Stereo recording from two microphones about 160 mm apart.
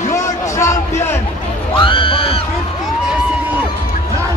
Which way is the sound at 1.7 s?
30° left (ahead or behind).